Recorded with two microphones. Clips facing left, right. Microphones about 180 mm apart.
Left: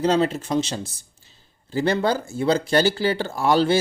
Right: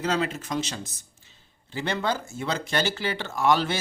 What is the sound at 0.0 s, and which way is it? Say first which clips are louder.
A man's voice: left 7 dB; 30° left (ahead or behind).